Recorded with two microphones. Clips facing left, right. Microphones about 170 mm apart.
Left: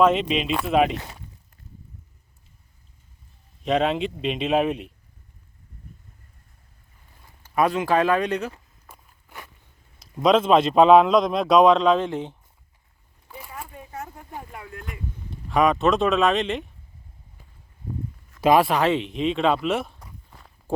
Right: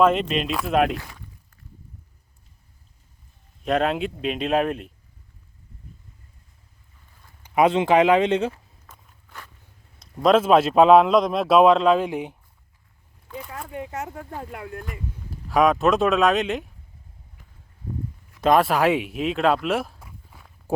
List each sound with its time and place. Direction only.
0.0 s a man's voice: centre (ahead or behind)
0.9 s speech: 25° left (ahead or behind)
3.6 s a man's voice: centre (ahead or behind)
7.4 s speech: 20° right (ahead or behind)
8.9 s walk: 10° left (ahead or behind)
10.0 s a man's voice: centre (ahead or behind)
13.5 s a sound: 85° right; by 14.7 s 70° right (ahead or behind)
14.8 s speech: centre (ahead or behind)
18.3 s speech: 5° left (ahead or behind)